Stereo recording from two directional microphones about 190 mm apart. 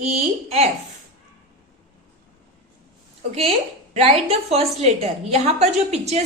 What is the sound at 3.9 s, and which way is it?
A woman's voice, 35° right (ahead or behind).